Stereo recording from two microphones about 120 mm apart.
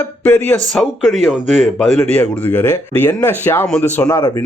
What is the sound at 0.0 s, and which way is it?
Speech, 15° left (ahead or behind).